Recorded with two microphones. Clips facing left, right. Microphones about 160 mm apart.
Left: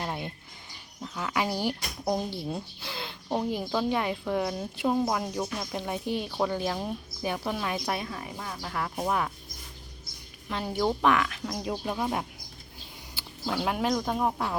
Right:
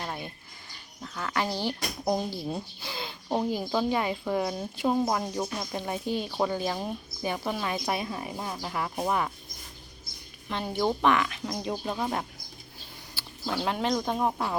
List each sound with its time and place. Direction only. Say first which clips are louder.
0.0 s bird: left 2 dB; 15° left (ahead or behind)
1.0 s speech: left 1 dB; 10° left (ahead or behind)
2.4 s speech: right 1 dB; centre (ahead or behind)
8.0 s speech: right 3 dB; 20° right (ahead or behind); by 9.3 s centre (ahead or behind)
10.5 s speech: even; centre (ahead or behind)
13.4 s speech: left 1 dB; 5° left (ahead or behind)